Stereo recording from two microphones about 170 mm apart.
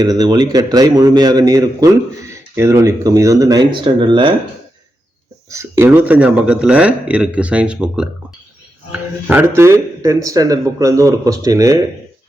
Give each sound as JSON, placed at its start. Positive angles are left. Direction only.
{"t": 0.0, "sound": "a man's voice", "side_deg": -25}
{"t": 5.5, "sound": "a man's voice", "side_deg": -15}